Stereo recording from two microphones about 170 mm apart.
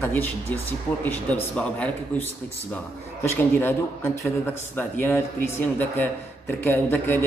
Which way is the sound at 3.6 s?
10° left (ahead or behind).